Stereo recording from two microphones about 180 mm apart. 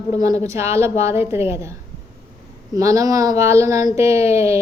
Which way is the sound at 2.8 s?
20° right (ahead or behind).